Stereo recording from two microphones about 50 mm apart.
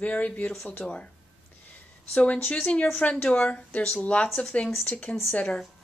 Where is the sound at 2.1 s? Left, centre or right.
Left.